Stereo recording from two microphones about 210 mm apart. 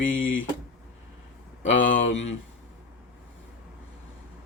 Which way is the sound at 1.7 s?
65° left (ahead or behind).